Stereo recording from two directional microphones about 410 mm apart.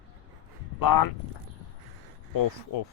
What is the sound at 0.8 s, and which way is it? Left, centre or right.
Speech, left.